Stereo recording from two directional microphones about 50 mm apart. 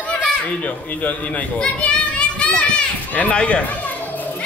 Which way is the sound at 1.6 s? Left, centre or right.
Left.